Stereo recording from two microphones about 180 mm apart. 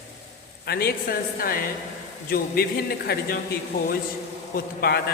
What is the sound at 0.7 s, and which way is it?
Speech, 60° left (ahead or behind).